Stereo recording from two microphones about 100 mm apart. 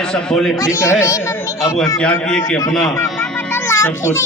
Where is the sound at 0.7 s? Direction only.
30° left (ahead or behind).